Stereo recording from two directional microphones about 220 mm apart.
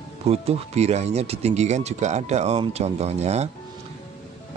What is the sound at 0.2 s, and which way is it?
Speech, 30° right (ahead or behind).